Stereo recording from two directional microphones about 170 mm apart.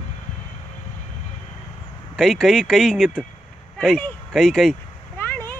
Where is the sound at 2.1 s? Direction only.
Centre (ahead or behind).